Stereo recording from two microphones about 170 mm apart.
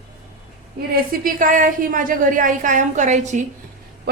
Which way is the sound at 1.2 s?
50° right (ahead or behind).